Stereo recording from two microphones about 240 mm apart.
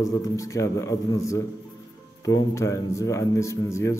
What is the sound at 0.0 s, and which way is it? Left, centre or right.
A man's voice, centre.